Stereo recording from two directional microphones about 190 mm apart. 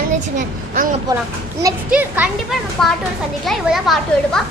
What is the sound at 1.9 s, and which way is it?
Speech, 10° right (ahead or behind).